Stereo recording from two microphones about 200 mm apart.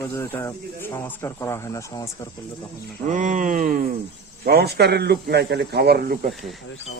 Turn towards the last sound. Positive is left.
turn(degrees=0)  # may be behind; listen again after turning